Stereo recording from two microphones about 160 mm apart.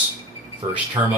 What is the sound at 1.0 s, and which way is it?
Speech, 20° right (ahead or behind).